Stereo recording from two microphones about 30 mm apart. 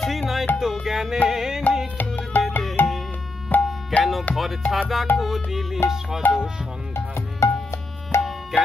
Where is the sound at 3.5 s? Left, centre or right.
Left.